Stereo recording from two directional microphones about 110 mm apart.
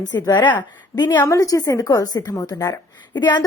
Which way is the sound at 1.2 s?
30° left (ahead or behind).